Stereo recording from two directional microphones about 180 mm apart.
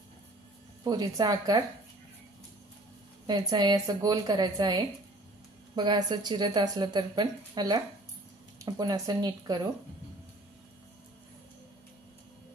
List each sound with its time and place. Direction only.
0.8 s a woman's voice: 20° right (ahead or behind)
3.3 s a woman's voice: 20° right (ahead or behind)